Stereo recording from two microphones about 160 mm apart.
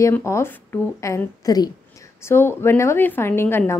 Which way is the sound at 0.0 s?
20° left (ahead or behind).